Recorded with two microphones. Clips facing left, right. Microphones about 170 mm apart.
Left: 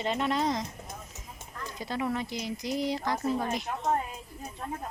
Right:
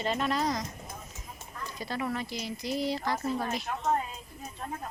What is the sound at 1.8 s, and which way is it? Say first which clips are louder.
Speech: left 2 dB; 15° left (ahead or behind).